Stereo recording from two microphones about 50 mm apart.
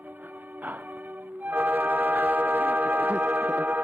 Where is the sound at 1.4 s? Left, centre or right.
Right.